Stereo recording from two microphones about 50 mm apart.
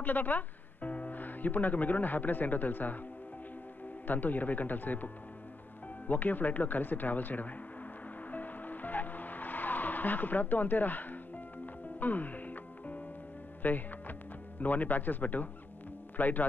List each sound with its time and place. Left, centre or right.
0.0 s speech: left
4.1 s speech: left
8.3 s music: left
14.6 s speech: left